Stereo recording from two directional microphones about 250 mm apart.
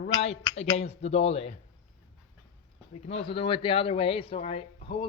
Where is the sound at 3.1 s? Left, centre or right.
Left.